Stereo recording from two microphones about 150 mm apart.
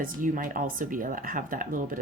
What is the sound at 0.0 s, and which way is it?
Speech, 65° right (ahead or behind).